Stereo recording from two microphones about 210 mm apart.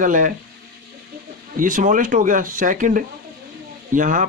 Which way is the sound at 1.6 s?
40° right (ahead or behind).